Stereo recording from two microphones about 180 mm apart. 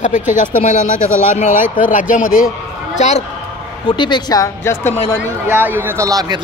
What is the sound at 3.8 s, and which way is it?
Speech, 25° left (ahead or behind).